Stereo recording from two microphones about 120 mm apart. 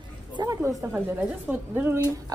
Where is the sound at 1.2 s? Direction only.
15° right (ahead or behind).